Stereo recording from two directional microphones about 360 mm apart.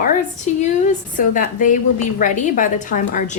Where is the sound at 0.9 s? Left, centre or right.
Left.